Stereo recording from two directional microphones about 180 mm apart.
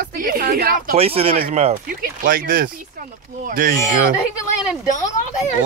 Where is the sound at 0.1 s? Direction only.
50° right (ahead or behind).